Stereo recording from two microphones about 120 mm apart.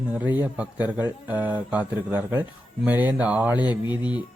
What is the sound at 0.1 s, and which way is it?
Speech, 15° right (ahead or behind).